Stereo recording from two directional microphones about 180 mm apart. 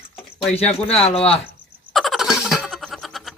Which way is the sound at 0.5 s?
35° left (ahead or behind).